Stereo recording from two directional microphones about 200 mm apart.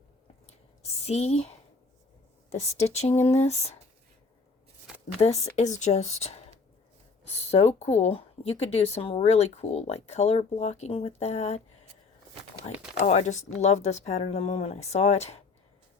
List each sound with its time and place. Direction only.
1.0 s speech: 30° left (ahead or behind)
2.5 s speech: 35° left (ahead or behind)
5.2 s speech: 30° left (ahead or behind)
7.5 s speech: 30° left (ahead or behind)
13.0 s speech: 35° left (ahead or behind)